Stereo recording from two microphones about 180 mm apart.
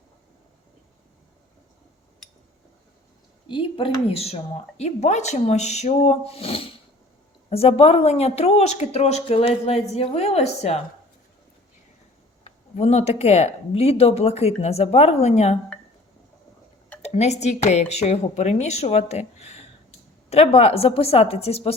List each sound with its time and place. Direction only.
3.5 s speech: 30° left (ahead or behind)
12.5 s speech: 35° left (ahead or behind)
17.0 s a woman's voice: 35° left (ahead or behind)